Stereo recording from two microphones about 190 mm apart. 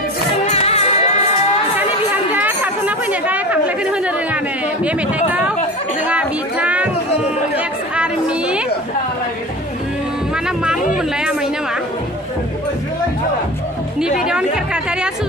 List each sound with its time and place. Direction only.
0.4 s music: 35° left (ahead or behind)
2.3 s chatter: 10° right (ahead or behind)
4.8 s speech: 5° right (ahead or behind)
6.1 s music: 5° right (ahead or behind)
7.5 s chatter: 5° right (ahead or behind)
10.4 s music: 5° right (ahead or behind)
10.9 s a sound: 5° right (ahead or behind)
14.3 s chatter: 5° right (ahead or behind)